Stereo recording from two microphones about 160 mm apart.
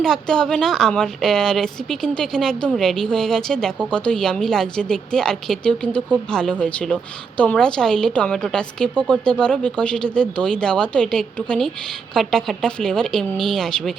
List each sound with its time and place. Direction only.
0.0 s a woman's voice: 5° left (ahead or behind)